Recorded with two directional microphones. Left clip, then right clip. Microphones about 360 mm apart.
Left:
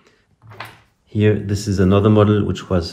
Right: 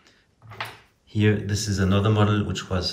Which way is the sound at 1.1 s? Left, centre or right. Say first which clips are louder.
Left 6 dB; centre.